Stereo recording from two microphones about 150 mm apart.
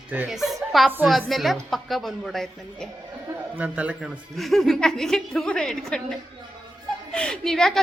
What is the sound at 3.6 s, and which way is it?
A man's voice, 10° right (ahead or behind).